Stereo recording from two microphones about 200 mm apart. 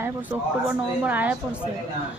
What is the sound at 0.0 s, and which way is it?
A woman's voice, 10° right (ahead or behind).